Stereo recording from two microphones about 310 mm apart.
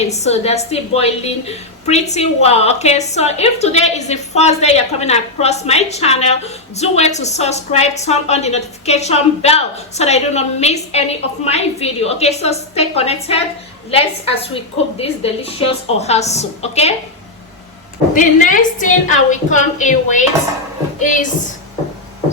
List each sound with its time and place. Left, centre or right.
0.0 s a woman's voice: left
18.1 s a woman's voice: left